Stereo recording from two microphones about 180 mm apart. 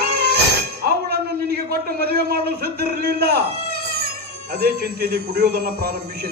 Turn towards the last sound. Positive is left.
turn(degrees=-60)  # may be behind; listen again after turning